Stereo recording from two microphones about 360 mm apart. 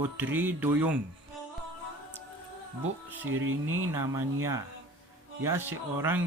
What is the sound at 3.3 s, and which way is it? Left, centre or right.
Speech, right.